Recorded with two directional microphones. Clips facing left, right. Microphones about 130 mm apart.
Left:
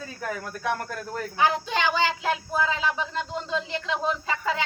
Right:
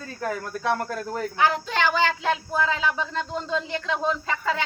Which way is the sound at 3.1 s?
15° left (ahead or behind).